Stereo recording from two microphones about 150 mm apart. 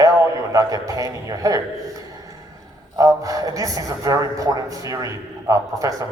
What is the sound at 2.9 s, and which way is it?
A man's voice, 20° right (ahead or behind).